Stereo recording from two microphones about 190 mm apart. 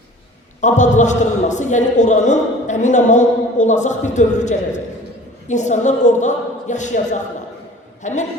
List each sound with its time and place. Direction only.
0.6 s a man's voice: 40° left (ahead or behind)